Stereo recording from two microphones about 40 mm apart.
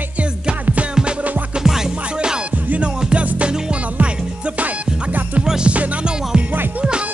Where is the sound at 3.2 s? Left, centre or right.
Right.